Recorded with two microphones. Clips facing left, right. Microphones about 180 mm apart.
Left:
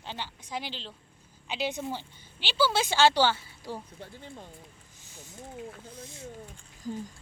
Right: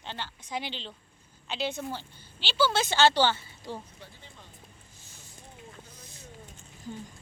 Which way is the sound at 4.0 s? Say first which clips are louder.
Left 7 dB; 50° left (ahead or behind).